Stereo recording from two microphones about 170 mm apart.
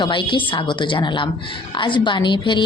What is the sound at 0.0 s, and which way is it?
Speech, 30° left (ahead or behind).